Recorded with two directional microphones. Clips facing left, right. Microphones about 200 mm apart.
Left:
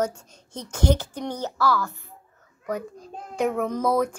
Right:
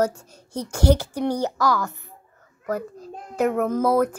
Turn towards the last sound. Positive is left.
turn(degrees=-5)  # may be behind; listen again after turning